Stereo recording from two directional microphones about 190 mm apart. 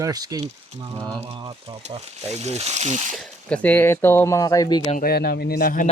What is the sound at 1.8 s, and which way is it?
Speech, 35° right (ahead or behind).